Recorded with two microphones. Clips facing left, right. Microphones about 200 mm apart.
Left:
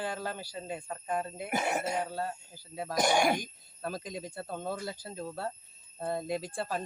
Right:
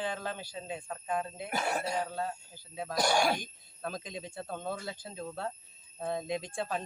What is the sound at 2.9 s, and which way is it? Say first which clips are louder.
Speech: left 2 dB; 20° left (ahead or behind).